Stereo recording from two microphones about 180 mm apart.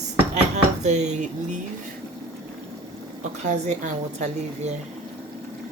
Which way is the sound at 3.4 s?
40° right (ahead or behind).